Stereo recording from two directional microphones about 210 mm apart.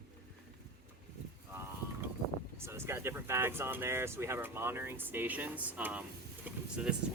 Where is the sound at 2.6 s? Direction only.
10° right (ahead or behind).